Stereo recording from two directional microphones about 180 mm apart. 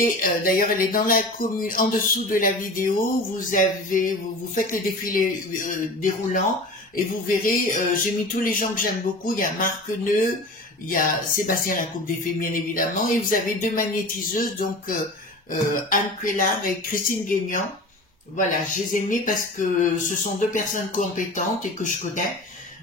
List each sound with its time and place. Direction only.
0.0 s music: 50° left (ahead or behind)